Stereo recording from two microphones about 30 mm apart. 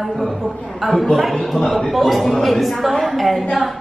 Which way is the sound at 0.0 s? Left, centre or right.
Centre.